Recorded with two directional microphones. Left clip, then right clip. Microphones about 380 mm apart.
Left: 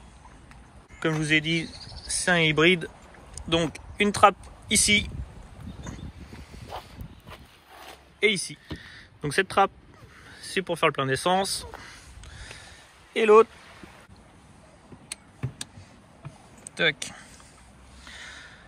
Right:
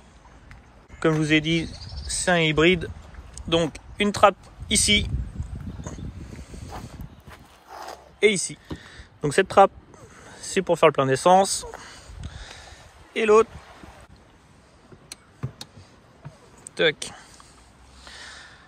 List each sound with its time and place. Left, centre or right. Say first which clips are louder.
0.9 s speech: right 3 dB; centre
7.7 s zipper: right 8 dB; centre
10.8 s speech: right 6 dB; centre
11.8 s a sound: right 2 dB; centre
16.7 s speech: right 3 dB; centre